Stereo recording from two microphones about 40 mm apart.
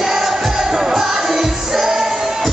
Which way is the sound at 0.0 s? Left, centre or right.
Centre.